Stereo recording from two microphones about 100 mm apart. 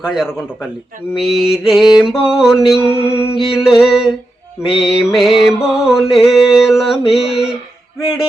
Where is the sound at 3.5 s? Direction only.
Centre (ahead or behind).